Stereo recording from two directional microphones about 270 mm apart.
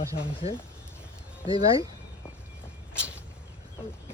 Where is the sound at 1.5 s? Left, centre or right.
Centre.